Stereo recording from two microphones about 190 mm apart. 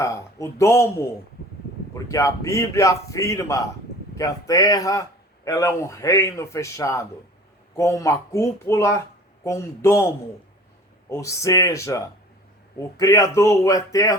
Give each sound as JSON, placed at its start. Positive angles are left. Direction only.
{"t": 0.0, "sound": "a man's voice", "side_deg": 15}
{"t": 2.0, "sound": "a man's voice", "side_deg": 15}
{"t": 11.1, "sound": "a man's voice", "side_deg": 15}